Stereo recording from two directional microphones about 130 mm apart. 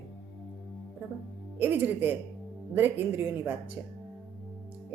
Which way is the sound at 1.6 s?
15° right (ahead or behind).